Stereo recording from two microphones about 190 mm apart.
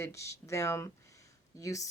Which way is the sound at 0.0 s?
15° left (ahead or behind).